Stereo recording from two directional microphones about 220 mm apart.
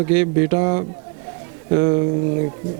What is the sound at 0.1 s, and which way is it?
A man's voice, 15° right (ahead or behind).